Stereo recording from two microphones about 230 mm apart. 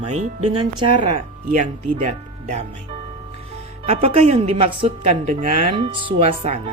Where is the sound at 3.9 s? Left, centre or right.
Right.